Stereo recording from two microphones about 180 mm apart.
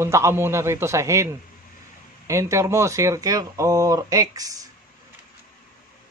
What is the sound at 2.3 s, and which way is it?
Speech, 15° right (ahead or behind).